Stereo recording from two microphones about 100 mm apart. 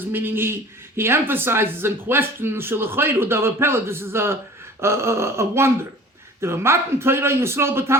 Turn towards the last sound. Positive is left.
turn(degrees=-25)  # may be behind; listen again after turning